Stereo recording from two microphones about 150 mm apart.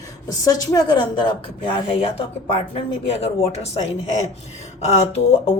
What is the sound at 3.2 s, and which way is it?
Speech, 45° left (ahead or behind).